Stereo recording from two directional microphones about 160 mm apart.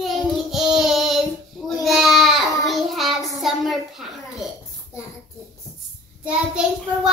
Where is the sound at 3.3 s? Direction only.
Centre (ahead or behind).